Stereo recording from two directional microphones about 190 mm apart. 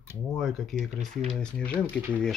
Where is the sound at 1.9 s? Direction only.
10° right (ahead or behind).